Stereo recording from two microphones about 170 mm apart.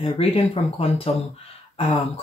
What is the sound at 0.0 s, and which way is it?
Speech, 35° left (ahead or behind).